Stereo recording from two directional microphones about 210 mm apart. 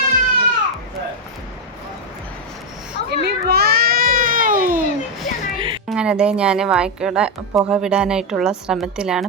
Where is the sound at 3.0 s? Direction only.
50° right (ahead or behind).